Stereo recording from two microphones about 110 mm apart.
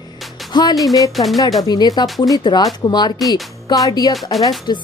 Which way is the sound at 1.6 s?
35° left (ahead or behind).